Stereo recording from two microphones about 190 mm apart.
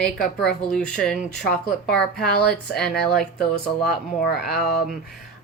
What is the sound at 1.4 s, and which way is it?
Speech, 55° left (ahead or behind).